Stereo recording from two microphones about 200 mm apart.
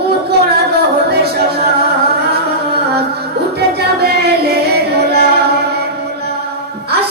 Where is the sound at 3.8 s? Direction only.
55° right (ahead or behind).